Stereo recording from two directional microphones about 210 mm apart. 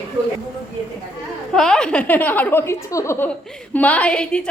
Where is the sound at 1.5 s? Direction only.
5° left (ahead or behind).